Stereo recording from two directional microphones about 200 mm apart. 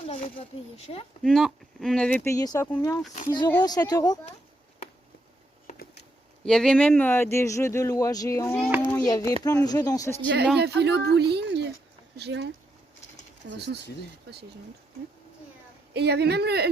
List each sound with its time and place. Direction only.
0.1 s speech: 30° left (ahead or behind)
1.2 s speech: centre (ahead or behind); by 4.2 s 20° left (ahead or behind)
5.6 s a sound: 50° left (ahead or behind)
6.4 s speech: 5° left (ahead or behind)
10.6 s speech: 55° right (ahead or behind)
15.9 s speech: 55° right (ahead or behind)